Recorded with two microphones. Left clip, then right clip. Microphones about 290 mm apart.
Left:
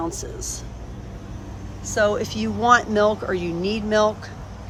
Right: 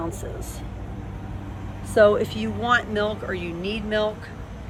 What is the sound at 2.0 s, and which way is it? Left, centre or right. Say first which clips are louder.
Speech: right 4 dB; centre.